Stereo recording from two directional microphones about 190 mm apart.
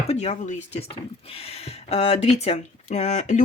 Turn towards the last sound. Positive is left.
turn(degrees=40)  # may be behind; listen again after turning